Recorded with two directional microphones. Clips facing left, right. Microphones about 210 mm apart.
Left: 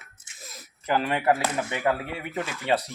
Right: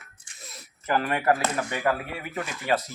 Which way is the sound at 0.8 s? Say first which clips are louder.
Even; 20° left (ahead or behind).